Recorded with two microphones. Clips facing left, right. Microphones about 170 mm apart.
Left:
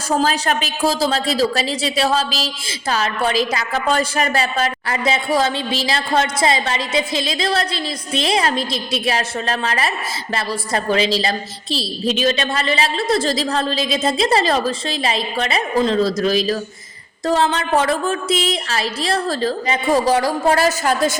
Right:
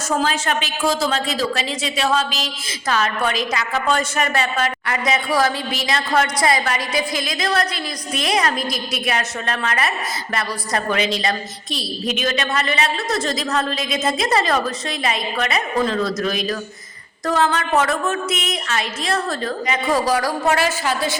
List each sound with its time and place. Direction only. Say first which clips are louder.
0.2 s a woman's voice: left 2 dB; 35° left (ahead or behind)